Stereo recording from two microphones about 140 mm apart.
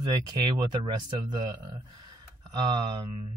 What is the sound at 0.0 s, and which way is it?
Speech, 30° right (ahead or behind).